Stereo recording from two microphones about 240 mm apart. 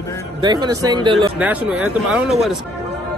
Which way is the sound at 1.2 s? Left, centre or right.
Centre.